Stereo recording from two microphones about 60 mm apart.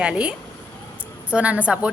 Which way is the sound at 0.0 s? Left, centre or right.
Centre.